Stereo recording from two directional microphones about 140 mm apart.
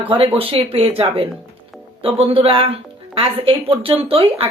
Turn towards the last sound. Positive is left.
turn(degrees=-45)  # may be behind; listen again after turning